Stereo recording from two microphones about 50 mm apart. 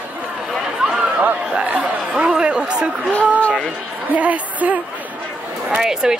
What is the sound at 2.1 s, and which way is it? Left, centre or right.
Speech, centre.